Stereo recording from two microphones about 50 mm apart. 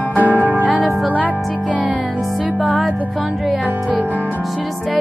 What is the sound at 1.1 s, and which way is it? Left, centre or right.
Speech, right.